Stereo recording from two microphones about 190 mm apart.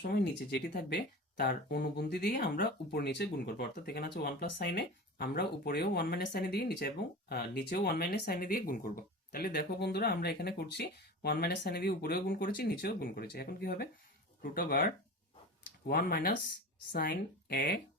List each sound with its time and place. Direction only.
0.0 s speech: 60° left (ahead or behind)
15.9 s speech: 50° left (ahead or behind)